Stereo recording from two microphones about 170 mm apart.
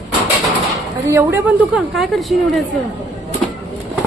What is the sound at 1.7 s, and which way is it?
Speech, centre (ahead or behind).